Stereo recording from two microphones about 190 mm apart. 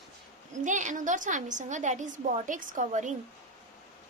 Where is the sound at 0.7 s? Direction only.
40° right (ahead or behind).